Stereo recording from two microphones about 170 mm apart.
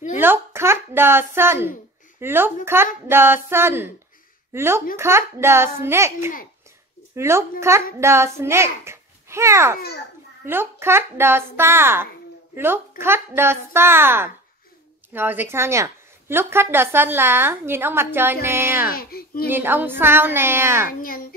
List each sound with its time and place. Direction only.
0.2 s a woman's voice: 15° right (ahead or behind)
18.9 s a child's voice: 60° left (ahead or behind)
19.5 s a woman's voice: 10° right (ahead or behind)